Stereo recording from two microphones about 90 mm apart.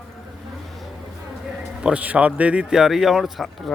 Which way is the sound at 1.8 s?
15° right (ahead or behind).